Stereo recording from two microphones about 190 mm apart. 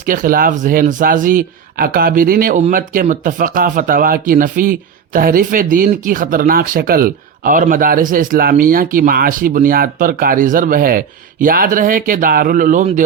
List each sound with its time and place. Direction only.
0.0 s speech: 45° right (ahead or behind)